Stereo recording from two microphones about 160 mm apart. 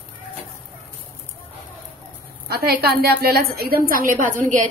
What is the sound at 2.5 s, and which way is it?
A woman's voice, 75° right (ahead or behind).